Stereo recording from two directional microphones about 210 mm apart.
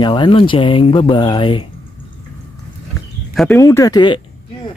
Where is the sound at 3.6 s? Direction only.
15° left (ahead or behind).